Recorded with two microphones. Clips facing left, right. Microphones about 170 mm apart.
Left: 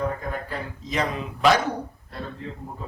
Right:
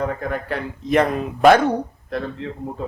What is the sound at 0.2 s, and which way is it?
A man's voice, 70° right (ahead or behind).